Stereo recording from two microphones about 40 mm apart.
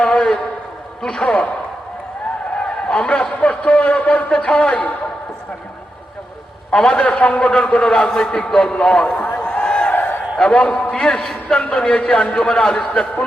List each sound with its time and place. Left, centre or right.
0.0 s a sound: left
1.0 s a man's voice: centre
2.6 s a man's voice: left
4.3 s a man's voice: left
6.7 s a man's voice: centre
7.2 s a man's voice: left
9.2 s a sound: left
9.9 s a sound: left
10.3 s a man's voice: left